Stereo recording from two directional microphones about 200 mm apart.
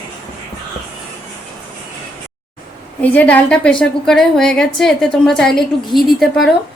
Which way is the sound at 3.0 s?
5° left (ahead or behind).